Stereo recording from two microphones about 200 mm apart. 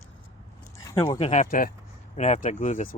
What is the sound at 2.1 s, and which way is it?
Speech, 35° left (ahead or behind).